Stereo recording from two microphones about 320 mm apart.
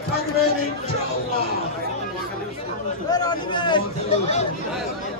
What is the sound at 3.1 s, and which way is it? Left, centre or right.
Speech, centre.